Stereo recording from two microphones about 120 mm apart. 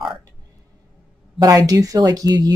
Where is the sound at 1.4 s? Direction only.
30° right (ahead or behind).